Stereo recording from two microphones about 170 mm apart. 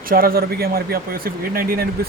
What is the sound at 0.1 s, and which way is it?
Speech, 60° right (ahead or behind).